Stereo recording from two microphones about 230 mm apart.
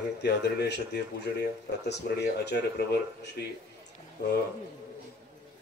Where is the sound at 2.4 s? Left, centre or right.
Left.